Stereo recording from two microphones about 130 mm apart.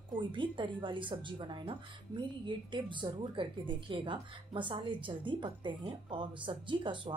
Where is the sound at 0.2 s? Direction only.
40° right (ahead or behind).